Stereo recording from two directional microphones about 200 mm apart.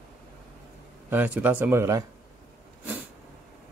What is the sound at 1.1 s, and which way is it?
Speech, 10° right (ahead or behind).